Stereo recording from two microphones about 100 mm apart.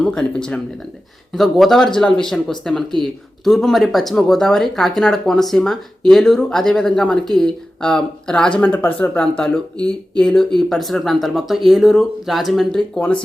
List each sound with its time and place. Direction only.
0.0 s speech: 5° left (ahead or behind)